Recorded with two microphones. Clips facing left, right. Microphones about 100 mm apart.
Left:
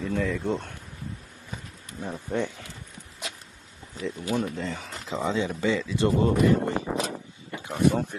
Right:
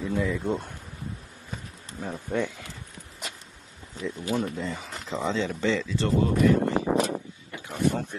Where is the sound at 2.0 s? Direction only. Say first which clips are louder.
Even; 5° right (ahead or behind).